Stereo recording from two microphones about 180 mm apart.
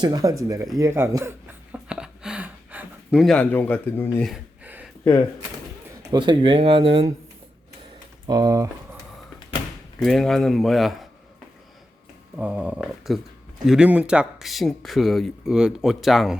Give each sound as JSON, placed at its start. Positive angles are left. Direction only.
{"t": 0.0, "sound": "speech", "side_deg": -20}
{"t": 1.7, "sound": "a sound", "side_deg": -5}
{"t": 4.3, "sound": "a sound", "side_deg": -10}
{"t": 6.1, "sound": "speech", "side_deg": -25}
{"t": 8.3, "sound": "speech", "side_deg": -20}
{"t": 10.0, "sound": "speech", "side_deg": 0}
{"t": 12.4, "sound": "speech", "side_deg": -5}